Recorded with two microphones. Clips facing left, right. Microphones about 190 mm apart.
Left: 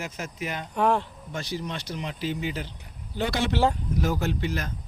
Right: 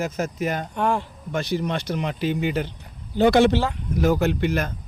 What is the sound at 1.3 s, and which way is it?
Speech, 60° right (ahead or behind).